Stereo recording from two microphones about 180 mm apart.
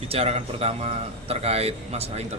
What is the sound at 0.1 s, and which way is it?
A man's voice, 35° right (ahead or behind).